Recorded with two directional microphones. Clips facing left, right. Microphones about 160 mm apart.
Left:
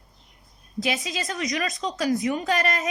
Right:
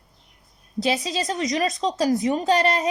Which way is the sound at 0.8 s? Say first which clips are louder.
Right 4 dB; 35° right (ahead or behind).